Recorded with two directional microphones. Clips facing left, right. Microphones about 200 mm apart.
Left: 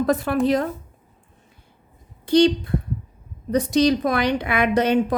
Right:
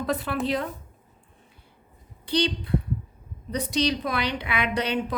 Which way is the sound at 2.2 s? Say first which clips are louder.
Left 9 dB; 45° left (ahead or behind).